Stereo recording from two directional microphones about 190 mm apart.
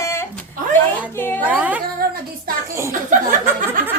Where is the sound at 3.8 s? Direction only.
45° right (ahead or behind).